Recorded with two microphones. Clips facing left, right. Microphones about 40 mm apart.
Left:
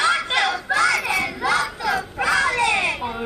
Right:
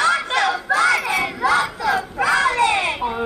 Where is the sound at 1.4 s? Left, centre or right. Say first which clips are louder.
Right 3 dB; right.